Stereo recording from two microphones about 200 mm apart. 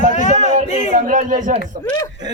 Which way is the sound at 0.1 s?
35° left (ahead or behind).